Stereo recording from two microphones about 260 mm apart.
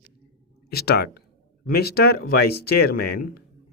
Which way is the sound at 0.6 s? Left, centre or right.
Left.